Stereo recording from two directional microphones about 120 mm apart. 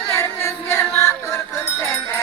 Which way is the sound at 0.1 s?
20° left (ahead or behind).